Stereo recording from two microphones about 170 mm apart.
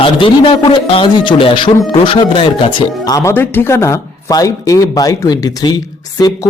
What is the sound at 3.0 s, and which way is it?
Speech, 20° left (ahead or behind).